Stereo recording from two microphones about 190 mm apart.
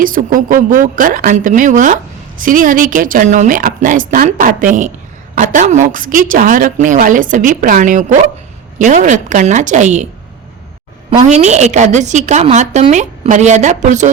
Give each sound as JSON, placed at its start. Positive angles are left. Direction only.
{"t": 0.0, "sound": "a woman's voice", "side_deg": -45}
{"t": 11.2, "sound": "a woman's voice", "side_deg": -35}